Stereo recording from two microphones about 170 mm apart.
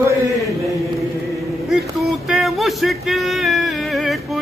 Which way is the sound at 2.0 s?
Centre (ahead or behind).